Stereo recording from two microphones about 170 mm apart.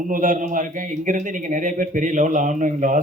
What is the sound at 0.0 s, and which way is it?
Speech, 50° right (ahead or behind).